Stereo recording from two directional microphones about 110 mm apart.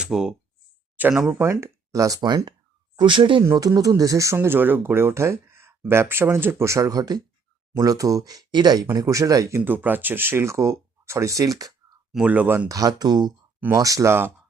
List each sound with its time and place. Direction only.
0.0 s speech: 5° right (ahead or behind)
1.3 s speech: 20° right (ahead or behind); by 3.4 s 50° right (ahead or behind)
3.4 s speech: 30° right (ahead or behind)
9.6 s speech: 15° right (ahead or behind); by 11.7 s 30° right (ahead or behind)
12.1 s speech: 15° right (ahead or behind)
12.6 s speech: 35° right (ahead or behind)